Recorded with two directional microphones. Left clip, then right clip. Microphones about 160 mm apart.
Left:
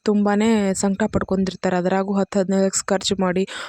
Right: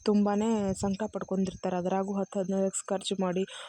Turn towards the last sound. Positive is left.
turn(degrees=40)  # may be behind; listen again after turning